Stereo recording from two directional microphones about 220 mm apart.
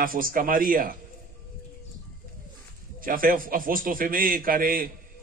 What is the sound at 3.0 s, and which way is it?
A man's voice, 40° right (ahead or behind).